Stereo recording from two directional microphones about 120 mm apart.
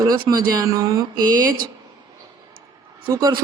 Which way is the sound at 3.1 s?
30° right (ahead or behind).